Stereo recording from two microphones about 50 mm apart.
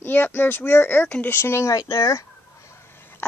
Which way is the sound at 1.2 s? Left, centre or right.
Left.